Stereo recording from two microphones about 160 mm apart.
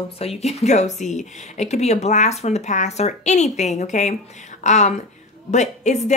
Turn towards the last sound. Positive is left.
turn(degrees=45)  # may be behind; listen again after turning